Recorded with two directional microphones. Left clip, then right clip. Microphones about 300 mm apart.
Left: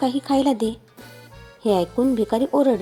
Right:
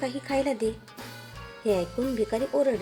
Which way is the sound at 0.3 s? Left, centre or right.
Centre.